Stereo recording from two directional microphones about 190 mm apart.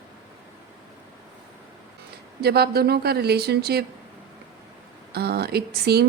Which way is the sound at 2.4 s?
55° right (ahead or behind).